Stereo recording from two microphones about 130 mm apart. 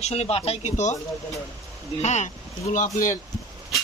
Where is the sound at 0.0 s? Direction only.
55° left (ahead or behind).